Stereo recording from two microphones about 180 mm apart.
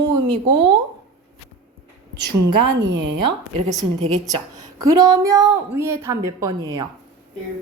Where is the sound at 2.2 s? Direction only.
70° right (ahead or behind).